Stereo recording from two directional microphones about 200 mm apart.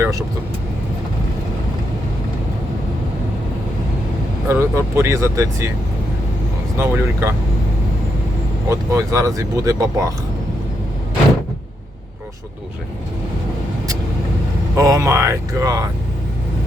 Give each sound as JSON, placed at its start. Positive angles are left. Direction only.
{"t": 0.0, "sound": "speech", "side_deg": -15}
{"t": 4.4, "sound": "speech", "side_deg": -15}
{"t": 6.7, "sound": "speech", "side_deg": -10}
{"t": 8.7, "sound": "speech", "side_deg": -15}
{"t": 14.8, "sound": "speech", "side_deg": -15}